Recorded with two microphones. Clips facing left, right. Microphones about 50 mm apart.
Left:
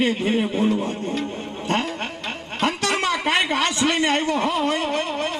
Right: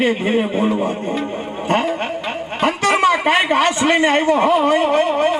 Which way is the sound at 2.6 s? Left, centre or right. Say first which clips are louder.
Right 7 dB; centre.